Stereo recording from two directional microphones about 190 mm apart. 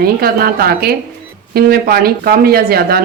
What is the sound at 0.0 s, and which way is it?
Speech, 55° right (ahead or behind).